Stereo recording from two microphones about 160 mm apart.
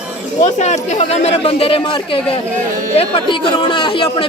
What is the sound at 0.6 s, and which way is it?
Speech, 45° left (ahead or behind).